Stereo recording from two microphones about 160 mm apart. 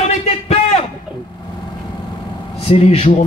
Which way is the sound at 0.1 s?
40° left (ahead or behind).